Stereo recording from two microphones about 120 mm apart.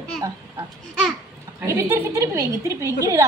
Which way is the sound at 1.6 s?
25° right (ahead or behind).